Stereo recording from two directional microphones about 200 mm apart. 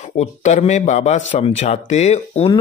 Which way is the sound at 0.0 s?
35° left (ahead or behind).